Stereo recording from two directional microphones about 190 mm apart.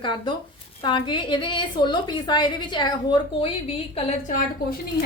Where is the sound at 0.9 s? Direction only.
25° left (ahead or behind).